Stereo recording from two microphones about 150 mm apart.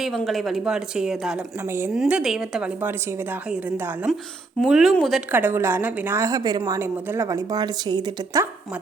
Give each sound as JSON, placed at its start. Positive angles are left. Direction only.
{"t": 0.0, "sound": "a woman's voice", "side_deg": 0}
{"t": 1.6, "sound": "a woman's voice", "side_deg": -15}
{"t": 1.9, "sound": "a woman's voice", "side_deg": -5}
{"t": 5.3, "sound": "a woman's voice", "side_deg": -15}